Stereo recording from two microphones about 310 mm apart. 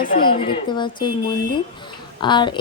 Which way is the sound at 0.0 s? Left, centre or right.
Left.